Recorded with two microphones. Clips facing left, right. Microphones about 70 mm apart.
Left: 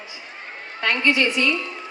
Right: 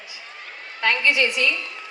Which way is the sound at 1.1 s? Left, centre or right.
Left.